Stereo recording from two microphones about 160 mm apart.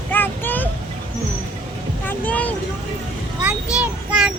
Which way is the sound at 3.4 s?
5° right (ahead or behind).